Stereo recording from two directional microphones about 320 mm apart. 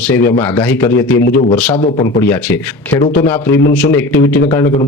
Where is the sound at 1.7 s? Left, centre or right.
Left.